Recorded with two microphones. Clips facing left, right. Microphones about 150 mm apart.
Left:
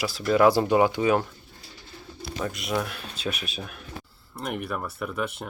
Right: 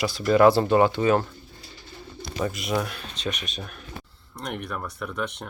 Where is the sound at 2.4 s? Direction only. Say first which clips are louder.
Right 2 dB; centre (ahead or behind).